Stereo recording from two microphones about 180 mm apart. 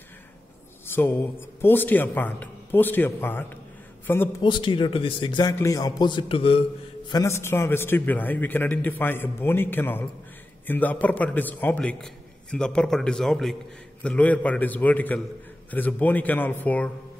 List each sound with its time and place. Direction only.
0.9 s a man's voice: 10° left (ahead or behind)
4.4 s a man's voice: 25° left (ahead or behind)
7.1 s a man's voice: 20° left (ahead or behind)